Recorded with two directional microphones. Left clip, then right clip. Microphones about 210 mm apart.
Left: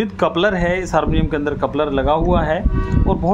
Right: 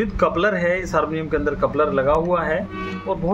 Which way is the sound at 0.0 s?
55° left (ahead or behind).